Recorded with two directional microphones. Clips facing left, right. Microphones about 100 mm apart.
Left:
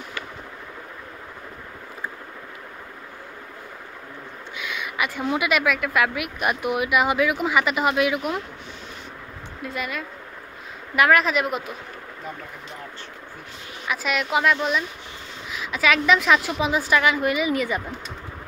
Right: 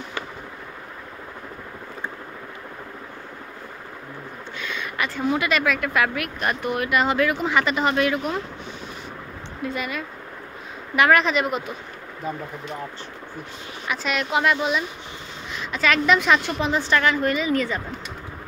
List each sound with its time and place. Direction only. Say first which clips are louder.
4.6 s a sound: left 1 dB; 10° left (ahead or behind)
5.3 s speech: left 1 dB; 5° left (ahead or behind)
9.6 s speech: right 2 dB; centre (ahead or behind)
13.8 s speech: even; centre (ahead or behind)